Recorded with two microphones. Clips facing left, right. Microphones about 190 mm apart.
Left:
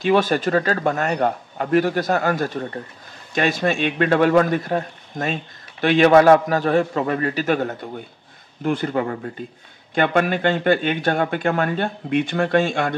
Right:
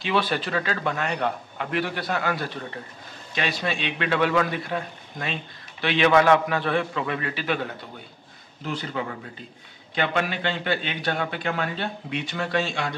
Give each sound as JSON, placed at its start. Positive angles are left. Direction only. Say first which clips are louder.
{"t": 0.0, "sound": "a man's voice", "louder": "left 7 dB", "side_deg": 45}